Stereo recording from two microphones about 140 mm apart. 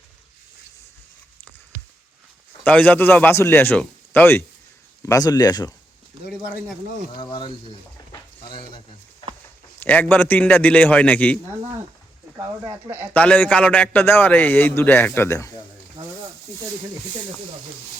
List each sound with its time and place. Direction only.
2.6 s a man's voice: 10° left (ahead or behind)
5.0 s speech: 25° left (ahead or behind)
7.2 s speech: 35° left (ahead or behind)
9.8 s a man's voice: 10° left (ahead or behind)
13.1 s a man's voice: 10° left (ahead or behind)